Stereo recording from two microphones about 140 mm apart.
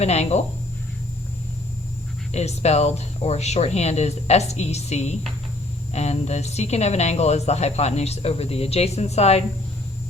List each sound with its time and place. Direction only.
0.0 s a woman's voice: 50° left (ahead or behind)
2.3 s a woman's voice: 50° left (ahead or behind)